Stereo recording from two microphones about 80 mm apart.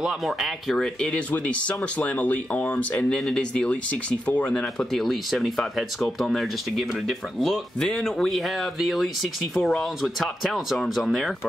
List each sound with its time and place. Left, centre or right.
0.0 s speech: centre
0.9 s speech: centre
3.2 s speech: centre